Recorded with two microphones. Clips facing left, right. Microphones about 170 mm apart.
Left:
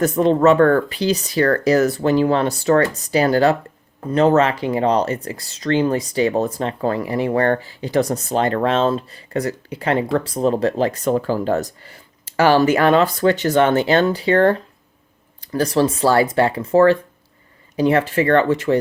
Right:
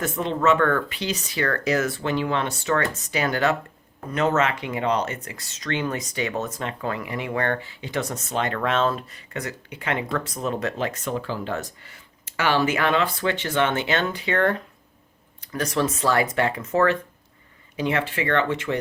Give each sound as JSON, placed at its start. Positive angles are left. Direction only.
{"t": 0.0, "sound": "speech", "side_deg": 40}